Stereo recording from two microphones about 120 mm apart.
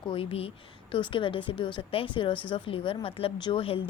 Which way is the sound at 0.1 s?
50° left (ahead or behind).